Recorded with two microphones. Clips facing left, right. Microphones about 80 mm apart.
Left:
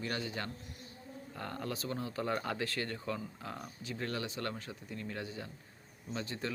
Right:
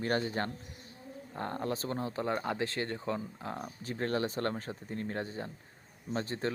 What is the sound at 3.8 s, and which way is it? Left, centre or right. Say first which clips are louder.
Speech: right 6 dB; right.